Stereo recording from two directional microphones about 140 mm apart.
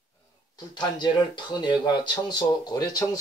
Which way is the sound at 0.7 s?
30° left (ahead or behind).